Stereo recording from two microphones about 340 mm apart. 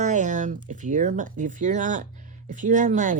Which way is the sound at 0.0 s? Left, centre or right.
Right.